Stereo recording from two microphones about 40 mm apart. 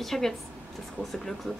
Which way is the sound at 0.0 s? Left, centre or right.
Centre.